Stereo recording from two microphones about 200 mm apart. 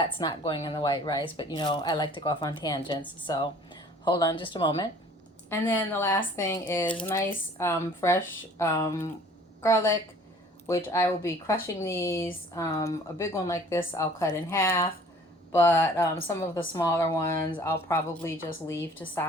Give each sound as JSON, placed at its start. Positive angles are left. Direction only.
{"t": 0.0, "sound": "speech", "side_deg": 25}
{"t": 5.5, "sound": "a woman's voice", "side_deg": 10}